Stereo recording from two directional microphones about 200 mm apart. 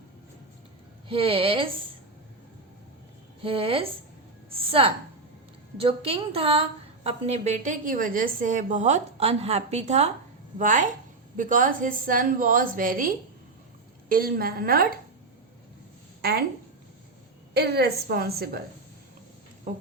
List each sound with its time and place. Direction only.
1.0 s a woman's voice: 25° right (ahead or behind)
3.4 s a woman's voice: 25° right (ahead or behind); by 14.9 s 50° right (ahead or behind)
17.5 s a woman's voice: 55° right (ahead or behind)
19.7 s a sound: 40° right (ahead or behind)